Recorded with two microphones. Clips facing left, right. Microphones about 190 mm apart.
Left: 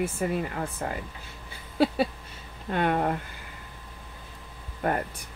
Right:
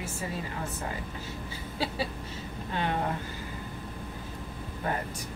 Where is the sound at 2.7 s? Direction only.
55° left (ahead or behind).